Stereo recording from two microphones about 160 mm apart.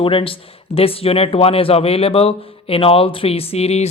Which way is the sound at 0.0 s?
35° left (ahead or behind).